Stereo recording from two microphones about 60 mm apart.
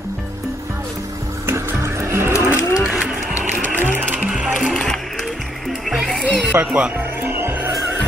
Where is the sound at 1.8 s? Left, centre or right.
Right.